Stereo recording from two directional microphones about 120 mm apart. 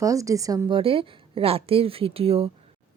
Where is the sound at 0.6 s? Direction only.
50° right (ahead or behind).